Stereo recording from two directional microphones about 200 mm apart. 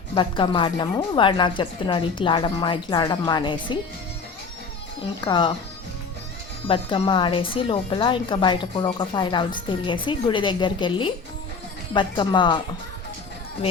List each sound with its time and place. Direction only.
0.1 s a woman's voice: 25° left (ahead or behind)
5.2 s a woman's voice: 25° left (ahead or behind)
6.7 s a woman's voice: 25° left (ahead or behind)